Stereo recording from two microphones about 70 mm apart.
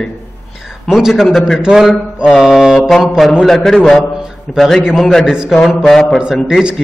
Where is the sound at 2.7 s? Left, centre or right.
Centre.